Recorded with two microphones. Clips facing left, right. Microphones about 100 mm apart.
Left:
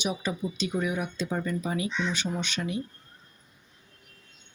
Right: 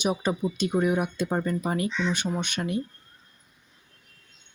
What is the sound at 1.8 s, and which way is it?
Speech, 5° left (ahead or behind).